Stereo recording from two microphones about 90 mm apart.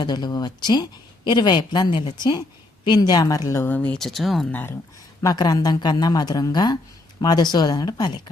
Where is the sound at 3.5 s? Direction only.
25° left (ahead or behind).